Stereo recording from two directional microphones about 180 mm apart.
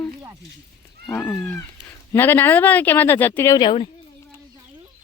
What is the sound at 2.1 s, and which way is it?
Speech, 10° left (ahead or behind).